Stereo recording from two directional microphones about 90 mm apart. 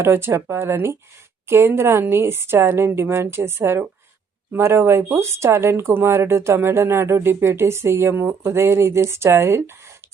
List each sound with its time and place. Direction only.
0.0 s speech: 25° right (ahead or behind)